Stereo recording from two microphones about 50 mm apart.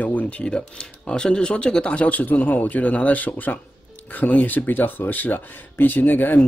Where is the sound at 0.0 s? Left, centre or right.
Left.